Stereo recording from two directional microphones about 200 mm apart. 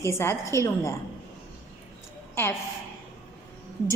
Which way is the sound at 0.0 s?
15° left (ahead or behind).